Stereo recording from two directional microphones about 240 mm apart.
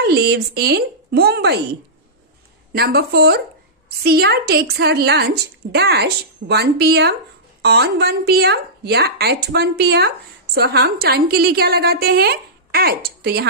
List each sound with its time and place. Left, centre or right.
0.0 s a woman's voice: right
2.7 s a woman's voice: right